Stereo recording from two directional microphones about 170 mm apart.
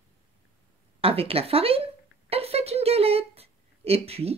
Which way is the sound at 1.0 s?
35° right (ahead or behind).